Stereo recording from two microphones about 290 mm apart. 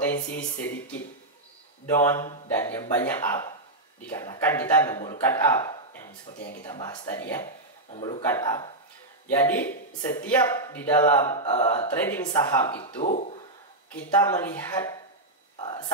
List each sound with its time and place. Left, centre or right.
0.4 s speech: centre
6.3 s speech: left
6.6 s speech: centre
12.8 s speech: left
13.9 s speech: centre
15.5 s a sound: centre